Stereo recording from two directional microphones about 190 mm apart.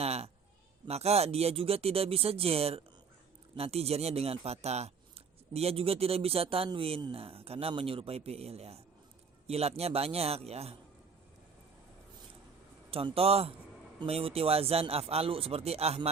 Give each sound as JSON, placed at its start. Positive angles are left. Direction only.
{"t": 0.0, "sound": "a sound", "side_deg": -35}
{"t": 0.9, "sound": "speech", "side_deg": -35}
{"t": 12.9, "sound": "speech", "side_deg": -30}